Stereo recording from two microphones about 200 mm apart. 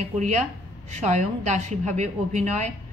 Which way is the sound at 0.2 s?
35° right (ahead or behind).